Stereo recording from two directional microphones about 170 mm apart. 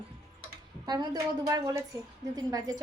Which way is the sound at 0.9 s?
20° right (ahead or behind).